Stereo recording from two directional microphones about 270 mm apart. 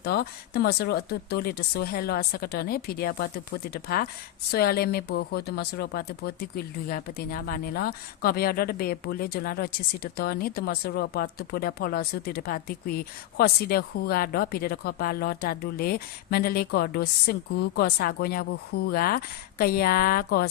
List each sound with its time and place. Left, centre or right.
0.0 s speech: left